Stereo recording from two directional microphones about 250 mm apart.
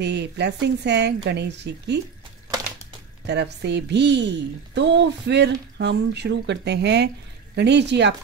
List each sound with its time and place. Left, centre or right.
0.0 s a woman's voice: right
3.3 s a woman's voice: right